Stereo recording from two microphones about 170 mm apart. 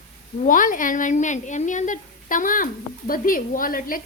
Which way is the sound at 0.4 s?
50° left (ahead or behind).